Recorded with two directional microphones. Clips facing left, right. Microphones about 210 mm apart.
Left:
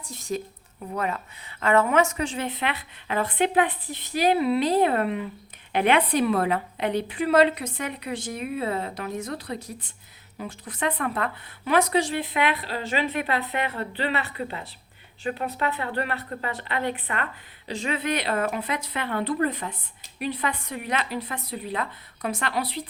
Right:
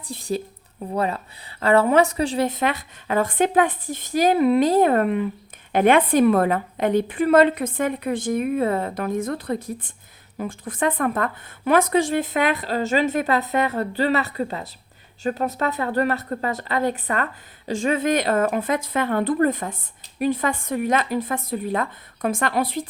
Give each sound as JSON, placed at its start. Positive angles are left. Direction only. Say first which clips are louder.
{"t": 0.0, "sound": "a woman's voice", "louder": "right 4 dB", "side_deg": -30}